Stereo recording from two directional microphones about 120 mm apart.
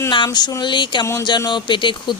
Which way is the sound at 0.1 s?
40° left (ahead or behind).